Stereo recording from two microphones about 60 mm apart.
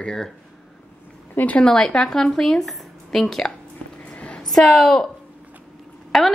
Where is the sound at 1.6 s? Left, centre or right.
Centre.